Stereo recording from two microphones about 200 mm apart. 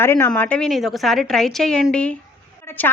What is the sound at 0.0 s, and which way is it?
A woman's voice, 10° left (ahead or behind).